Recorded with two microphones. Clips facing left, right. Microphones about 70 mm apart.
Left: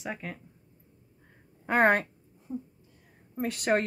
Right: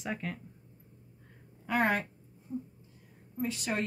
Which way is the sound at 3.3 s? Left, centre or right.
Left.